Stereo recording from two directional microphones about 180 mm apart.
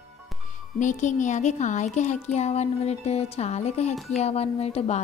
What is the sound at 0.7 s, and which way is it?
Speech, 45° left (ahead or behind).